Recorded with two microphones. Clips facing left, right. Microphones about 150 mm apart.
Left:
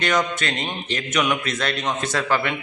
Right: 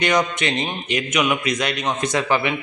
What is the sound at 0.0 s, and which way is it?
A man's voice, 15° right (ahead or behind).